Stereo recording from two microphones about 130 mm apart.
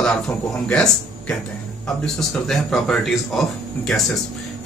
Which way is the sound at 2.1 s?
5° left (ahead or behind).